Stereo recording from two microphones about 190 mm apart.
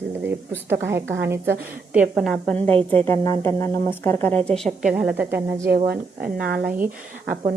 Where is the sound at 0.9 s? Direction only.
15° right (ahead or behind).